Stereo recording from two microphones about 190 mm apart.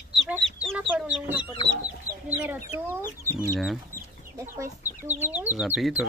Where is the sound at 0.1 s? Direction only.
Centre (ahead or behind).